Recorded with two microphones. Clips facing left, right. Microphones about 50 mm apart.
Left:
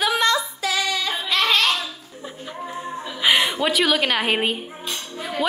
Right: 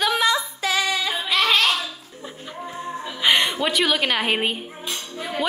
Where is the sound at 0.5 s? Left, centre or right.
Right.